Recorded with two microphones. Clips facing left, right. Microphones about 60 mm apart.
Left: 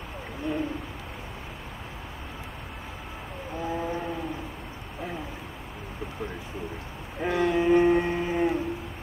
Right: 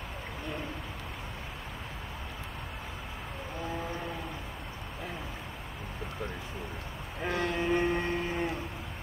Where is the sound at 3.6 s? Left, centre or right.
Centre.